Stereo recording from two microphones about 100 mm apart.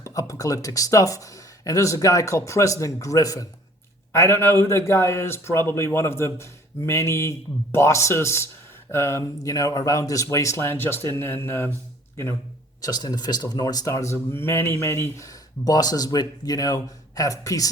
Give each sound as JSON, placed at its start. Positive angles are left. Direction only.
{"t": 0.0, "sound": "speech", "side_deg": 35}
{"t": 12.8, "sound": "speech", "side_deg": 40}